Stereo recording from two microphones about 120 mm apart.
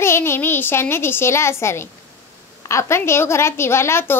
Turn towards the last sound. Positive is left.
turn(degrees=20)  # may be behind; listen again after turning